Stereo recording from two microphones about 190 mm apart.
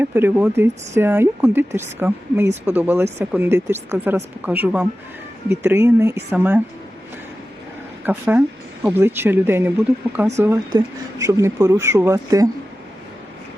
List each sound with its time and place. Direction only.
0.0 s speech: 10° right (ahead or behind)
8.0 s speech: 10° right (ahead or behind)